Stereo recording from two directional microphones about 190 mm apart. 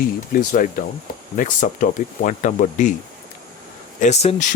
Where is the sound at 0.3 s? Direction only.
45° left (ahead or behind).